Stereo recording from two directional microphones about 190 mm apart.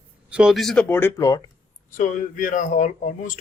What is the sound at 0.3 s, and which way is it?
Speech, 5° right (ahead or behind).